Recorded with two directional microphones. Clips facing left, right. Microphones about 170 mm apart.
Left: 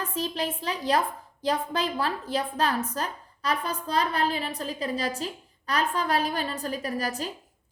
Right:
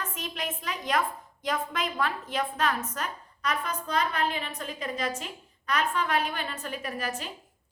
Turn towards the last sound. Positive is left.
turn(degrees=35)  # may be behind; listen again after turning